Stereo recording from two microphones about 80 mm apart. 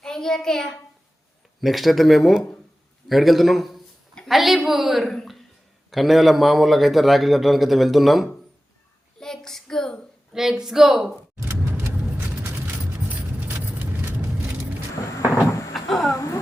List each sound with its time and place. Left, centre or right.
0.0 s a child's voice: centre
10.3 s speech: centre
11.4 s vehicle: right
12.1 s keys jangling: right
15.7 s a sound: centre
16.1 s a sound: left